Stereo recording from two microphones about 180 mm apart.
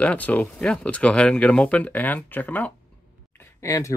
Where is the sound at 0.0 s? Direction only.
10° left (ahead or behind).